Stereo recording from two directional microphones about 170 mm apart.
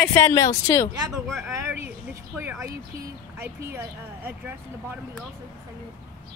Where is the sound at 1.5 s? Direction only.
15° right (ahead or behind).